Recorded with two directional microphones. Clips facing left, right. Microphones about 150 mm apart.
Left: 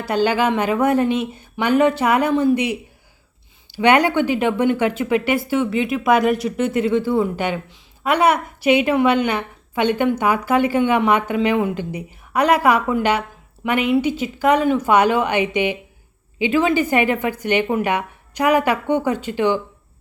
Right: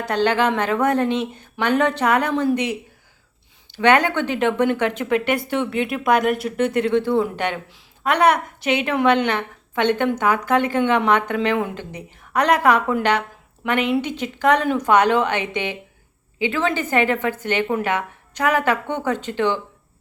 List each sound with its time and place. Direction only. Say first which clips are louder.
0.0 s speech: left 1 dB; 10° left (ahead or behind)